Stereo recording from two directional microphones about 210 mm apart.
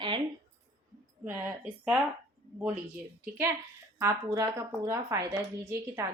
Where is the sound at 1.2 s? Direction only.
10° right (ahead or behind).